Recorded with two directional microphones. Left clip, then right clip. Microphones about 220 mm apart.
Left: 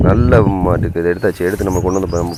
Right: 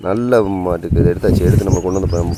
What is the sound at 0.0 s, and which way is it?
Speech, 5° left (ahead or behind).